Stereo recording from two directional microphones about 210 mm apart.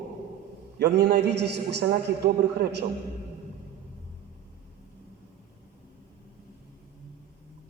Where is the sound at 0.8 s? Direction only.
50° right (ahead or behind).